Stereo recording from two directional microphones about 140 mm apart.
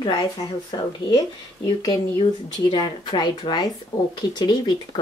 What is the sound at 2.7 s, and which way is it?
Speech, 35° left (ahead or behind).